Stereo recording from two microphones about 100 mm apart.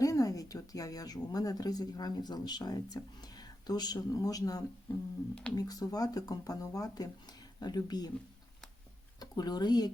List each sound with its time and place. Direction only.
0.0 s speech: 35° left (ahead or behind)
5.3 s speech: 10° left (ahead or behind)
5.5 s speech: 40° left (ahead or behind)
9.2 s speech: 45° left (ahead or behind)